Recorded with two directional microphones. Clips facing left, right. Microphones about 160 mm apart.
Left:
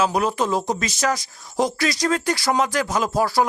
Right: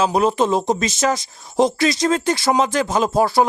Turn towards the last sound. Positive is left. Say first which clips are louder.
# right 4 dB
turn(degrees=-25)  # may be behind; listen again after turning